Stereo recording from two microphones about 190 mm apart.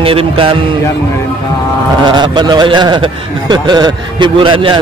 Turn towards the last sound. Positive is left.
turn(degrees=-25)  # may be behind; listen again after turning